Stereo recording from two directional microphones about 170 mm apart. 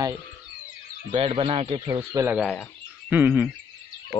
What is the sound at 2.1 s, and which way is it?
Speech, 10° right (ahead or behind).